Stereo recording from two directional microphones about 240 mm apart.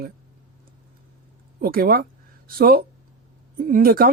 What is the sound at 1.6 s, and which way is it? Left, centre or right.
Speech, right.